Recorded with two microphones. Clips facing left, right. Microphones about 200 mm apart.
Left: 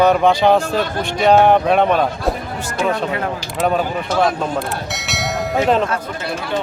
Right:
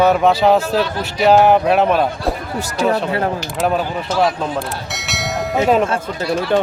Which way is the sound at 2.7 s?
35° right (ahead or behind).